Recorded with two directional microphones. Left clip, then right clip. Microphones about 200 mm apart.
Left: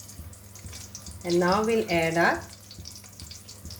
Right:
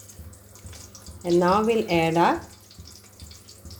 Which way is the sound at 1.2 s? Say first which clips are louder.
Right 3 dB; 25° right (ahead or behind).